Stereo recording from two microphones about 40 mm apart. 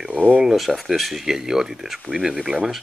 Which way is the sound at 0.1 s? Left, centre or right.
Right.